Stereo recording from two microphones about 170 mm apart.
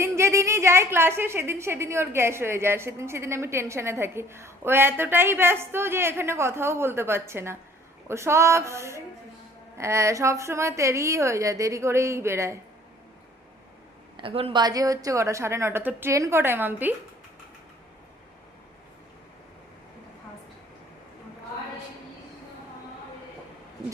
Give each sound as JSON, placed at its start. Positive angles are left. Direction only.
{"t": 0.0, "sound": "a woman's voice", "side_deg": -15}
{"t": 14.2, "sound": "a woman's voice", "side_deg": -35}